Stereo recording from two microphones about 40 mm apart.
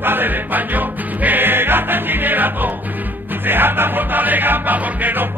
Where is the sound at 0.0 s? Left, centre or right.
Right.